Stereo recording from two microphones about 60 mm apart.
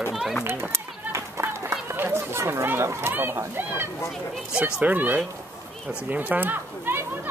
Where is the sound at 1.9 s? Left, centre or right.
Right.